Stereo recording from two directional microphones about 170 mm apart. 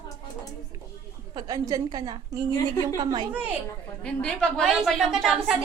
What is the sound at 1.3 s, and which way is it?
Speech, 20° right (ahead or behind).